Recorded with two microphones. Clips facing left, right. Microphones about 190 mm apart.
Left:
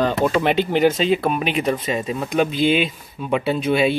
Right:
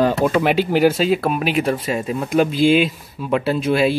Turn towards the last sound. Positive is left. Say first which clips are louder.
# right 1 dB
turn(degrees=0)  # may be behind; listen again after turning